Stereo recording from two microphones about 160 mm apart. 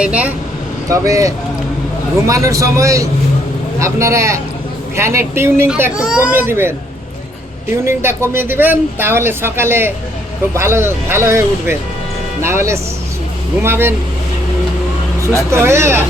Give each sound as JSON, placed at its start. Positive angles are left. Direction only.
{"t": 0.0, "sound": "speech", "side_deg": -10}
{"t": 0.9, "sound": "a man's voice", "side_deg": -20}
{"t": 7.9, "sound": "speech", "side_deg": -15}
{"t": 15.4, "sound": "speech", "side_deg": -15}